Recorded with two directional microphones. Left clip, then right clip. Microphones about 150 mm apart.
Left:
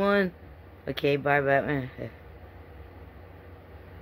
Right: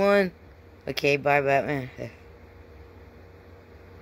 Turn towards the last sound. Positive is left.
turn(degrees=-15)  # may be behind; listen again after turning